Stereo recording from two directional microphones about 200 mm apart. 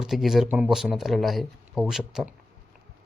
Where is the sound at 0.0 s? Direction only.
Centre (ahead or behind).